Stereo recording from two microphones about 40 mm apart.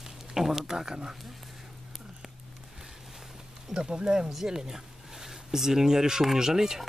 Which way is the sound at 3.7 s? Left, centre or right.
Centre.